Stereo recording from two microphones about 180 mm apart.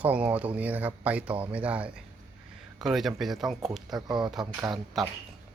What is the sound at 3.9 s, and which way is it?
Speech, 20° right (ahead or behind).